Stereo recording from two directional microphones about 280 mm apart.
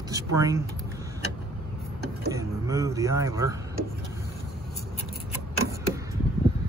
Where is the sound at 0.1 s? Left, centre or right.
Centre.